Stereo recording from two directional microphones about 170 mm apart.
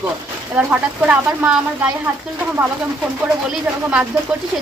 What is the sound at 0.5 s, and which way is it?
Speech, 10° right (ahead or behind).